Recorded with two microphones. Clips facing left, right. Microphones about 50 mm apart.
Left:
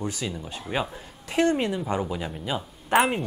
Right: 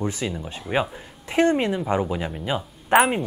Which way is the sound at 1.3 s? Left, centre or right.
Right.